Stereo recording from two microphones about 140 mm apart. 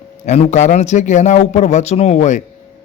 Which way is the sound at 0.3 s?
50° left (ahead or behind).